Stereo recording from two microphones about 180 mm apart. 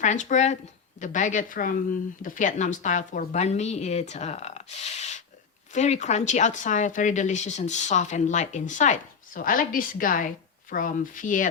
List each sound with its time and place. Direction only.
0.0 s a woman's voice: 45° left (ahead or behind)